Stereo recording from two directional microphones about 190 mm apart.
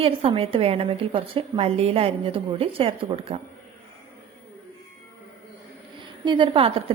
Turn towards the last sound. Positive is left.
turn(degrees=-30)  # may be behind; listen again after turning